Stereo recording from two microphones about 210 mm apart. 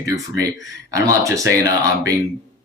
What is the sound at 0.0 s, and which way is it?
Speech, 15° right (ahead or behind).